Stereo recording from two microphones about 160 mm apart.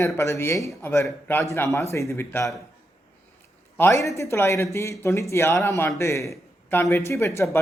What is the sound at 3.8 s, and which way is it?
Speech, 20° left (ahead or behind).